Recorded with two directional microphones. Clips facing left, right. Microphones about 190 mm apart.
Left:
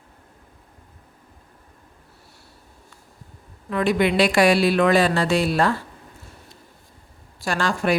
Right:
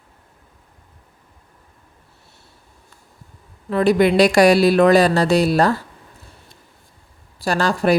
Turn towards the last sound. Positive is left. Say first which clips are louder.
# right 4 dB
turn(degrees=-35)  # may be behind; listen again after turning